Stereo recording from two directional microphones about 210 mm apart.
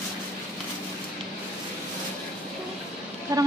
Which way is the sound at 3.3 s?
15° right (ahead or behind).